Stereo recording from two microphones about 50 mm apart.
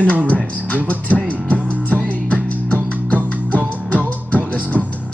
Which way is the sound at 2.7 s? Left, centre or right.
Left.